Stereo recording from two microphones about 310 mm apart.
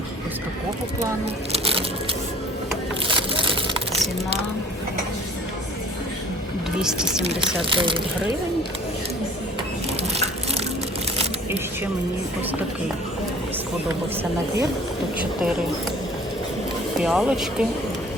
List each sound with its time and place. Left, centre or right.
3.2 s crushing: centre
6.8 s speech: centre
17.0 s speech: centre